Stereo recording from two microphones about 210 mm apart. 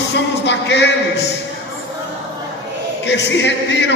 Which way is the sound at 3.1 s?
55° left (ahead or behind).